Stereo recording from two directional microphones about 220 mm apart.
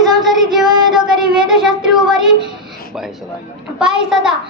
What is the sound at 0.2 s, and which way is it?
Child singing, centre (ahead or behind).